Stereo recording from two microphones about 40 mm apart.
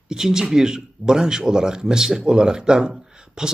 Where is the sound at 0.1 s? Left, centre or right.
Centre.